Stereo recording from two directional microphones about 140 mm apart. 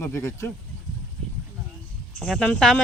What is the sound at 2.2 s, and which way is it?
Speech, centre (ahead or behind).